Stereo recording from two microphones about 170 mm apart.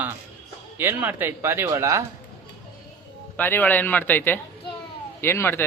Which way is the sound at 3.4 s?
10° left (ahead or behind).